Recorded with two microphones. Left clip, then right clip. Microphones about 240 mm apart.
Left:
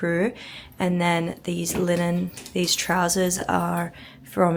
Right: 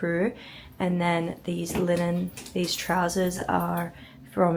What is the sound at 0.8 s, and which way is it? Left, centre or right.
Speech, centre.